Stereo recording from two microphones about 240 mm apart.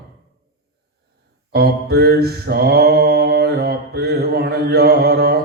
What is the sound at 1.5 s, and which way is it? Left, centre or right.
Mantra, right.